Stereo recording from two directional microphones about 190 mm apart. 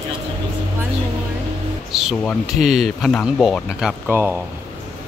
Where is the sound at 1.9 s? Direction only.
5° right (ahead or behind).